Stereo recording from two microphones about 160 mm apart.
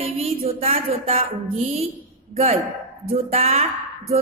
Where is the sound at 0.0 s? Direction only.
40° right (ahead or behind).